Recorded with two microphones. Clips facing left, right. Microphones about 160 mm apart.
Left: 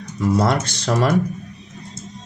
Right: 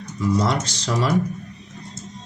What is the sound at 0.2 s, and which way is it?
Speech, 60° left (ahead or behind).